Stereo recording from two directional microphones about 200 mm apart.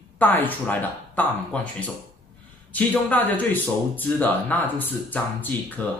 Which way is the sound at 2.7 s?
10° left (ahead or behind).